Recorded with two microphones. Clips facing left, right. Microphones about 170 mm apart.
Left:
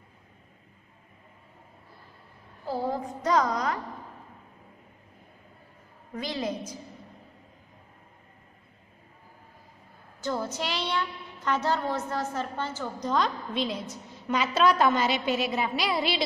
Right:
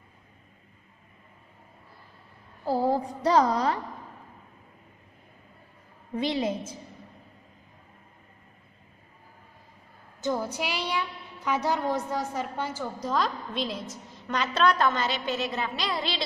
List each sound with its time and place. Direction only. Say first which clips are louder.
2.6 s a woman's voice: right 5 dB; 40° right (ahead or behind)
6.1 s a woman's voice: right 4 dB; 25° right (ahead or behind)
10.2 s a woman's voice: right 2 dB; 15° right (ahead or behind); by 16.2 s 10° left (ahead or behind)